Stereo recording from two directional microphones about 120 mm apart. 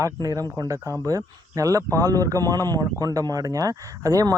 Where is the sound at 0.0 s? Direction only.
30° right (ahead or behind).